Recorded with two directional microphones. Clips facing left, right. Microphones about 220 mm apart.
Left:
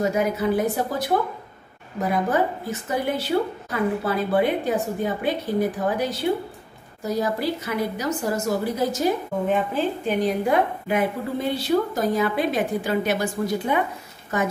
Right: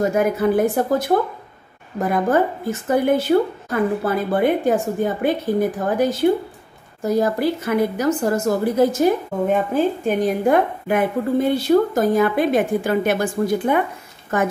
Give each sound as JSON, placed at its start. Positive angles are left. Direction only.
{"t": 0.0, "sound": "a woman's voice", "side_deg": -50}
{"t": 2.9, "sound": "a woman's voice", "side_deg": -50}